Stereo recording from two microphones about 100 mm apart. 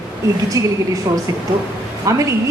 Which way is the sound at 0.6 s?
35° right (ahead or behind).